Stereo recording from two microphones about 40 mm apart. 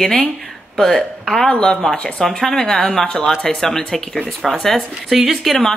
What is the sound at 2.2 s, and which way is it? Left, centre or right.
Speech, centre.